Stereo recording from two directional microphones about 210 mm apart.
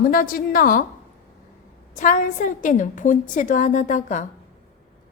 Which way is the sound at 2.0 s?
40° left (ahead or behind).